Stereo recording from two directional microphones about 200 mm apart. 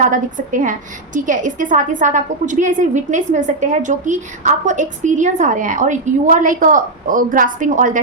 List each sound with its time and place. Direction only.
0.0 s a woman's voice: 40° right (ahead or behind)